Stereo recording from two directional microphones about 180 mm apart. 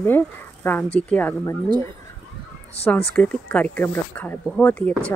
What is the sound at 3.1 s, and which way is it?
Speech, 5° left (ahead or behind).